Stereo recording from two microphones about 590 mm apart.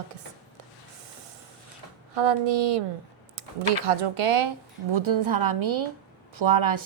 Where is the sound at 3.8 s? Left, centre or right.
Right.